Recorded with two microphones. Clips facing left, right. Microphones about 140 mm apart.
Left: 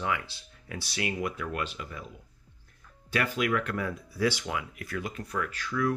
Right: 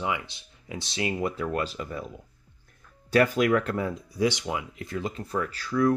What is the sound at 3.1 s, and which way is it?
Speech, 40° right (ahead or behind).